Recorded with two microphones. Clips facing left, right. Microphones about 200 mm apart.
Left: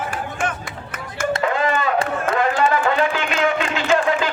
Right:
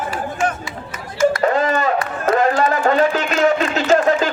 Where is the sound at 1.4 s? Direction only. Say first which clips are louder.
Right 3 dB; 40° right (ahead or behind).